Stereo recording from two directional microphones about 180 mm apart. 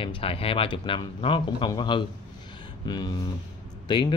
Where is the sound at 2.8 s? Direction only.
25° left (ahead or behind).